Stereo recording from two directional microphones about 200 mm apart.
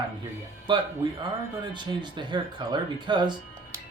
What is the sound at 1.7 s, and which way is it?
Speech, 25° right (ahead or behind).